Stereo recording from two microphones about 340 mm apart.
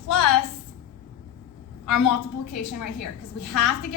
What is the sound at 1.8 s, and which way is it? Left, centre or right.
A woman's voice, left.